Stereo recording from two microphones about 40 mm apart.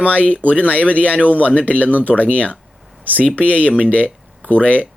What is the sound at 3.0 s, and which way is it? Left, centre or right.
Speech, right.